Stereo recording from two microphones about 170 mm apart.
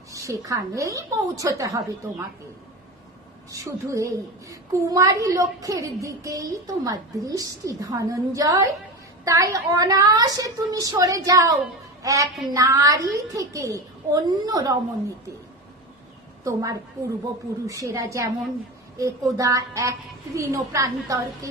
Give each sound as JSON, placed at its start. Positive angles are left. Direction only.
{"t": 0.1, "sound": "a woman's voice", "side_deg": -20}
{"t": 3.5, "sound": "a woman's voice", "side_deg": -20}
{"t": 16.4, "sound": "a woman's voice", "side_deg": -20}